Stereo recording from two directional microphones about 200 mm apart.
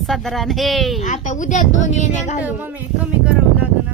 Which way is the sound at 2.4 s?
10° right (ahead or behind).